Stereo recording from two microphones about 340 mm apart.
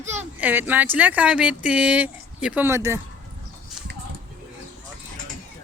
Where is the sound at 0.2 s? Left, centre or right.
Centre.